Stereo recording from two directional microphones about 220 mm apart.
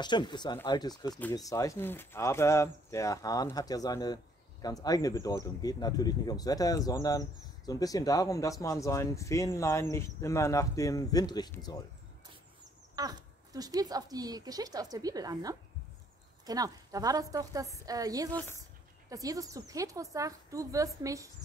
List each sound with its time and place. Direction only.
0.0 s speech: 20° left (ahead or behind)
12.9 s speech: 15° right (ahead or behind)